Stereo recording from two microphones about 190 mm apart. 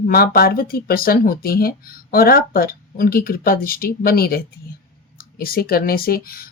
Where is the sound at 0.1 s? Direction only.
50° left (ahead or behind).